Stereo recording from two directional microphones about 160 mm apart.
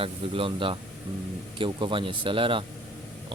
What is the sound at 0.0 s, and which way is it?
Speech, 35° right (ahead or behind).